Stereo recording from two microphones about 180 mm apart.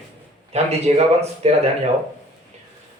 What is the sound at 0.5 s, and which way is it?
Speech, 35° right (ahead or behind).